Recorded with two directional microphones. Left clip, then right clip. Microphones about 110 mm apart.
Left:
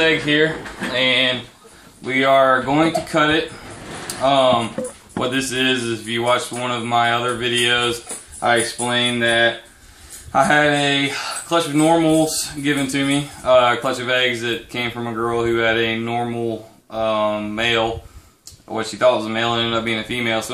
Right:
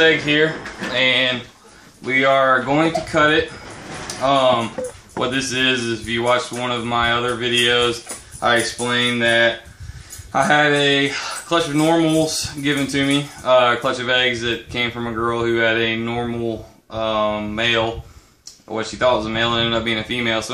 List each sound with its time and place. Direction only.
0.0 s speech: centre (ahead or behind); by 9.5 s 25° right (ahead or behind)
10.3 s speech: 10° right (ahead or behind)